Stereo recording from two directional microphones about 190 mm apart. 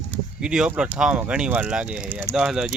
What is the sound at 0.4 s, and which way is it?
Speech, 5° right (ahead or behind).